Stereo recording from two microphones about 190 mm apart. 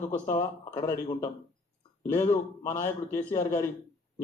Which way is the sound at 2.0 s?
15° left (ahead or behind).